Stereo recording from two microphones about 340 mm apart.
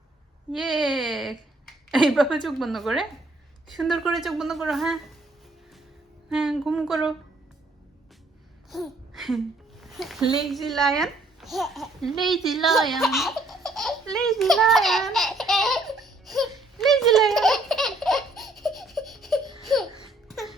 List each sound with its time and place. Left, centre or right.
0.5 s speech: centre
6.3 s speech: centre
8.7 s a sound: centre
19.6 s laughter: centre